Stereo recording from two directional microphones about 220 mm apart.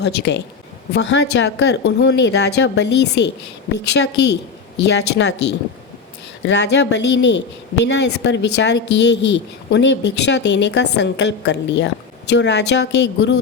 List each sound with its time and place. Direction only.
0.0 s a woman's voice: 50° left (ahead or behind)
6.4 s a woman's voice: 50° left (ahead or behind)